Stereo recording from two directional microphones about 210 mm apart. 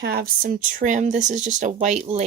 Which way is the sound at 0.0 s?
45° right (ahead or behind).